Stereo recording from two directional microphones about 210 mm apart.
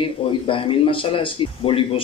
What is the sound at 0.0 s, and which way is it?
Speech, 25° left (ahead or behind).